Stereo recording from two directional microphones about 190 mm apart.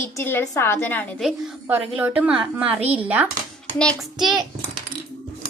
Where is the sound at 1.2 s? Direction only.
5° right (ahead or behind).